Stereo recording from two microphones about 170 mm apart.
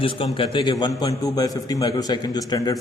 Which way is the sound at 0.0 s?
30° left (ahead or behind).